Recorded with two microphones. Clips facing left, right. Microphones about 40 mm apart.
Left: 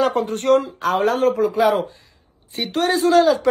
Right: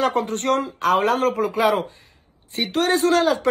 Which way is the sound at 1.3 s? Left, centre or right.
Right.